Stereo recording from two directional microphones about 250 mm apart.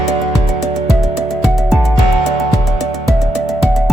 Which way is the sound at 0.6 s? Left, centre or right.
Centre.